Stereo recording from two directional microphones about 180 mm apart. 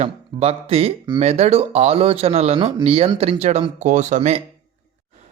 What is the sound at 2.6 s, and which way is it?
Speech, 25° right (ahead or behind).